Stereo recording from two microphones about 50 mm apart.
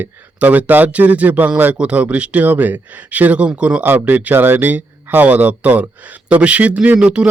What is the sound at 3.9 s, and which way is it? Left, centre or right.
A man's voice, right.